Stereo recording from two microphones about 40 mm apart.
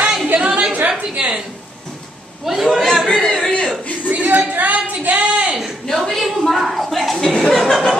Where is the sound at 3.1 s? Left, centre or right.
Left.